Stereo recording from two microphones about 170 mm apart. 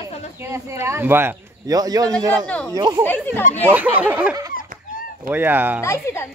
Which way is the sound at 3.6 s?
10° right (ahead or behind).